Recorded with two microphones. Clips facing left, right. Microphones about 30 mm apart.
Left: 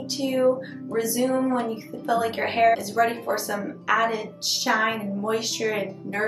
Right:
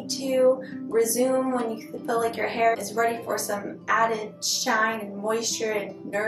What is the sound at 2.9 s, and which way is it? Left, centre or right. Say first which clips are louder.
Speech: left 2 dB; left.